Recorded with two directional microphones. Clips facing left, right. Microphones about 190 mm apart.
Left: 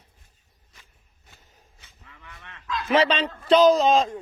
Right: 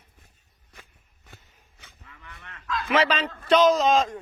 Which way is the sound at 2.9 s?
30° left (ahead or behind).